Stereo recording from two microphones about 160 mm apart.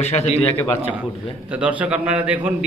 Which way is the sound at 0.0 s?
45° left (ahead or behind).